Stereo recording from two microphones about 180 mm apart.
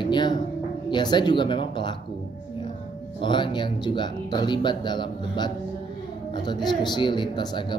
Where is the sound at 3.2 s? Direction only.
25° left (ahead or behind).